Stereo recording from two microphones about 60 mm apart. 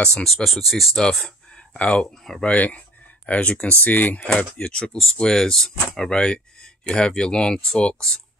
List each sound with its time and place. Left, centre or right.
0.0 s speech: centre
0.9 s speech: centre
2.0 s speech: centre
2.4 s speech: left
4.4 s speech: centre